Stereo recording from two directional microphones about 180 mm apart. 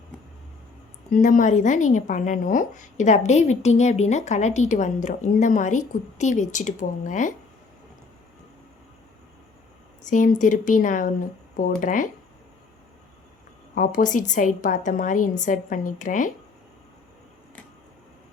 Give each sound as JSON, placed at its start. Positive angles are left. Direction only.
{"t": 1.1, "sound": "speech", "side_deg": 45}
{"t": 10.1, "sound": "speech", "side_deg": 45}
{"t": 13.7, "sound": "speech", "side_deg": 50}